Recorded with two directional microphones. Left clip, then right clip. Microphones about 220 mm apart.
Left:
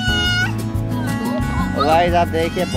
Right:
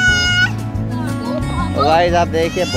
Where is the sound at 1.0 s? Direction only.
Centre (ahead or behind).